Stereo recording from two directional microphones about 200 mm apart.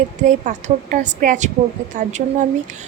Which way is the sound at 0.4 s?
40° right (ahead or behind).